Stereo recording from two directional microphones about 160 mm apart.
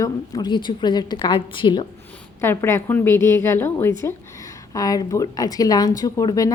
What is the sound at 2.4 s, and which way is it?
A woman's voice, 15° left (ahead or behind).